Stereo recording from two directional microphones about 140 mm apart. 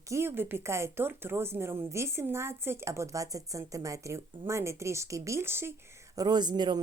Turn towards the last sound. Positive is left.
turn(degrees=-30)  # may be behind; listen again after turning